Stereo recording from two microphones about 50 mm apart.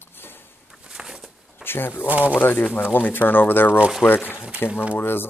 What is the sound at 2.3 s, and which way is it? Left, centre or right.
A man's voice, left.